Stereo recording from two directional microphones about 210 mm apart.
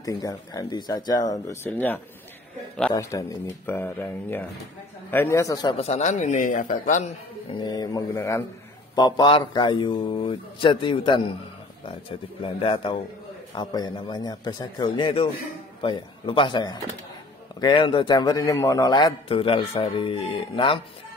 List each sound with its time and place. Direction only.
0.0 s speech: 15° left (ahead or behind)
5.8 s a man's voice: 30° left (ahead or behind)
7.6 s a man's voice: 20° left (ahead or behind)